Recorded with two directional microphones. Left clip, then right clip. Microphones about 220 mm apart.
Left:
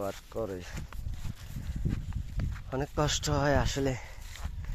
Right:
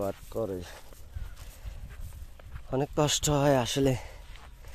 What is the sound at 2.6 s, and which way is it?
Speech, 30° right (ahead or behind).